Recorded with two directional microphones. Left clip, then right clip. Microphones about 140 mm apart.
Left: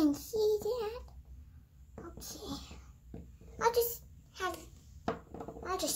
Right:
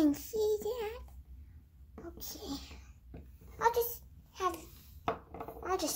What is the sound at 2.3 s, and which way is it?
Whispering, 25° left (ahead or behind).